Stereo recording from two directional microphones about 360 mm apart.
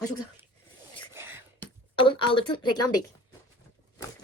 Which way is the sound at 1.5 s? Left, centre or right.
Centre.